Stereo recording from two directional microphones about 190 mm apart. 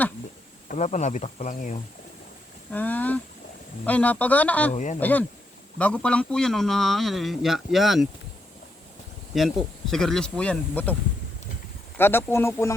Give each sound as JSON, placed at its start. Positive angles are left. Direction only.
{"t": 0.7, "sound": "speech", "side_deg": 40}
{"t": 2.7, "sound": "speech", "side_deg": 10}
{"t": 4.7, "sound": "speech", "side_deg": 40}
{"t": 4.9, "sound": "a man's voice", "side_deg": 10}
{"t": 9.3, "sound": "a man's voice", "side_deg": 0}
{"t": 11.9, "sound": "speech", "side_deg": 10}